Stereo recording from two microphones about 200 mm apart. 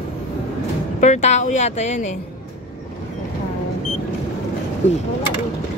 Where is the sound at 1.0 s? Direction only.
35° left (ahead or behind).